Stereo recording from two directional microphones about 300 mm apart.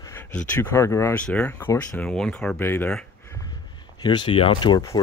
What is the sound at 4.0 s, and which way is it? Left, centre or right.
Speech, centre.